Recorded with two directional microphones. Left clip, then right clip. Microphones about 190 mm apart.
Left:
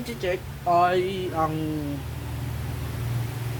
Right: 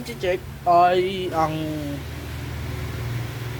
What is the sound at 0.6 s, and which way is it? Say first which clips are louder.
Speech: right 4 dB; 5° right (ahead or behind).